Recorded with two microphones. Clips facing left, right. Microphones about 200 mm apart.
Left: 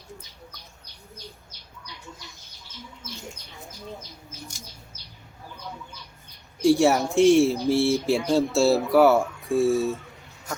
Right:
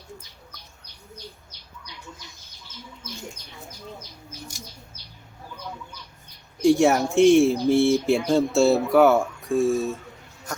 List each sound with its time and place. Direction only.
6.6 s speech: centre (ahead or behind)
9.4 s speech: 15° right (ahead or behind)